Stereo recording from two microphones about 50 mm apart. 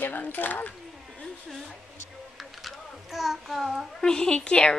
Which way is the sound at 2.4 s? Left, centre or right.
Centre.